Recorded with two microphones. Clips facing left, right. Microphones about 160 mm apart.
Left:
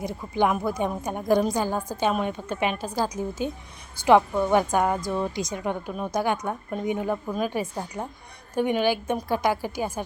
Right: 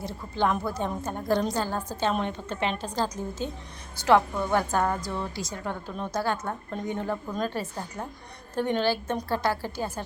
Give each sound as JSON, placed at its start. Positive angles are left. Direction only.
{"t": 0.0, "sound": "a woman's voice", "side_deg": 15}